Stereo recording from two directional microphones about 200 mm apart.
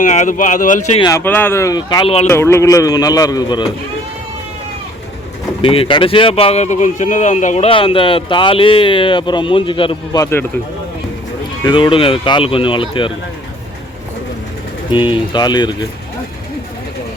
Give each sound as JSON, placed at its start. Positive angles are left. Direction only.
{"t": 0.0, "sound": "speech", "side_deg": 40}
{"t": 1.0, "sound": "a man's voice", "side_deg": 10}
{"t": 2.2, "sound": "a man's voice", "side_deg": 10}
{"t": 5.6, "sound": "speech", "side_deg": 25}
{"t": 11.6, "sound": "speech", "side_deg": 25}
{"t": 14.8, "sound": "speech", "side_deg": 25}